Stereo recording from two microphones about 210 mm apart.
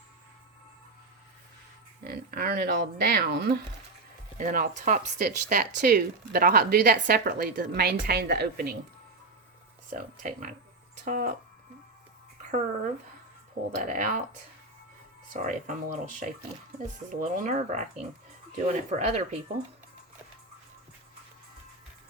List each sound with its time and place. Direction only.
2.0 s speech: 45° right (ahead or behind)
4.4 s speech: 40° right (ahead or behind)
9.9 s speech: 35° right (ahead or behind)
12.4 s a sound: 35° right (ahead or behind)
13.8 s speech: 40° right (ahead or behind)
15.3 s speech: 35° right (ahead or behind)